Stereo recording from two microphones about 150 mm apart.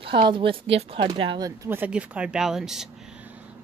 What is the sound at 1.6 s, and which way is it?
Speech, 10° right (ahead or behind).